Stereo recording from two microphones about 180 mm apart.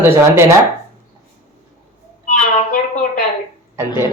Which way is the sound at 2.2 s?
45° left (ahead or behind).